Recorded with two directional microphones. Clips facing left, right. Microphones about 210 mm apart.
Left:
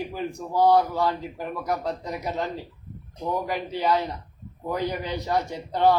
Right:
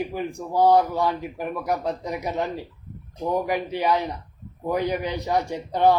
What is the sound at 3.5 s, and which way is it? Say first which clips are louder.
Speech: right 2 dB; 15° right (ahead or behind).